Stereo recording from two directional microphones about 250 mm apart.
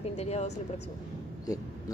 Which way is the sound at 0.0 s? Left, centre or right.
Left.